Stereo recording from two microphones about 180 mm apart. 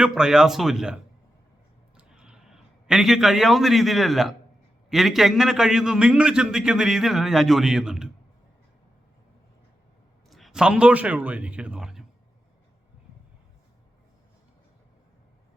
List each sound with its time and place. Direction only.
0.0 s a man's voice: 5° right (ahead or behind)
2.0 s a sound: 5° right (ahead or behind)
4.9 s a man's voice: centre (ahead or behind)
10.2 s a man's voice: centre (ahead or behind)